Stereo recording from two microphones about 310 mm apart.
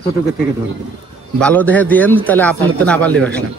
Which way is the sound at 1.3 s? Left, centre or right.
Centre.